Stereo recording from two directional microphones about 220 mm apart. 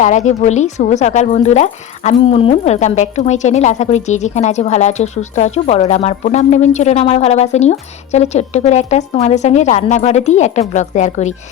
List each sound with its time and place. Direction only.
0.0 s speech: 30° left (ahead or behind)